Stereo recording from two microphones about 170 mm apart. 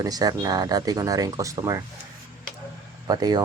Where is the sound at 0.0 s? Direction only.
20° right (ahead or behind).